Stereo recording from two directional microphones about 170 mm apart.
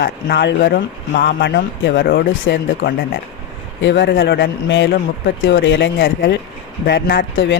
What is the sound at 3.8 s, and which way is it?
Speech, 90° left.